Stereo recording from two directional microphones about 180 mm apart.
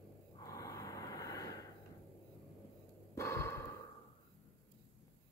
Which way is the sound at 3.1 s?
15° left (ahead or behind).